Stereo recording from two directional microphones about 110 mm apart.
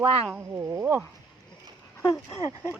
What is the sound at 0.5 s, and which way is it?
Speech, 25° right (ahead or behind).